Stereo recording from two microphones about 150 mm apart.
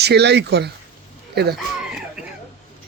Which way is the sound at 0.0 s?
90° right.